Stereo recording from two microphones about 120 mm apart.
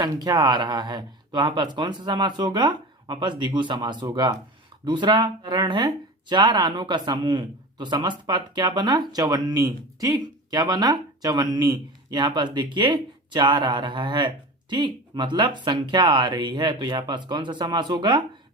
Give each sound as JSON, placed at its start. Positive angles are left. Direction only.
{"t": 0.0, "sound": "speech", "side_deg": -35}